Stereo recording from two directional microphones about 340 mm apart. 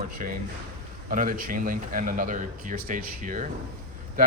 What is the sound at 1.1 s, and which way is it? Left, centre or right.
Speech, right.